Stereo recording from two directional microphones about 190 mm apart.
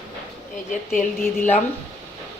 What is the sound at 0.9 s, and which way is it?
Speech, 40° left (ahead or behind).